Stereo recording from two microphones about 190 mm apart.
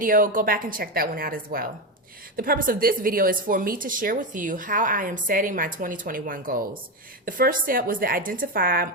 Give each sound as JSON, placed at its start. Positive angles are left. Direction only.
{"t": 0.0, "sound": "speech", "side_deg": -45}